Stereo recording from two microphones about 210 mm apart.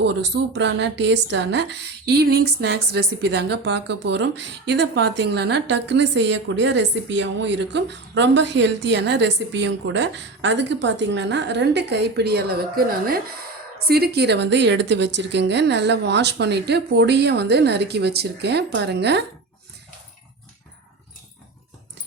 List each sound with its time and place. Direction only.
0.0 s a woman's voice: 55° right (ahead or behind)